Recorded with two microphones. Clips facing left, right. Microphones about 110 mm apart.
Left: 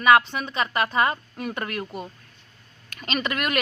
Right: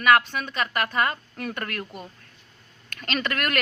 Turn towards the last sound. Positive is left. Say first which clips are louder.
# left 1 dB
turn(degrees=15)  # may be behind; listen again after turning